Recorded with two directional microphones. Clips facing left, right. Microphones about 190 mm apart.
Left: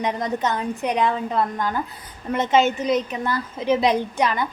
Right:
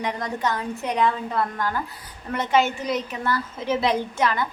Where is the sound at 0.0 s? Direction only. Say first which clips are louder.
Left 3 dB; 20° left (ahead or behind).